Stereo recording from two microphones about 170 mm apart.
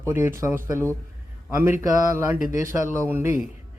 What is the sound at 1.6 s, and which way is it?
A man's voice, 15° right (ahead or behind).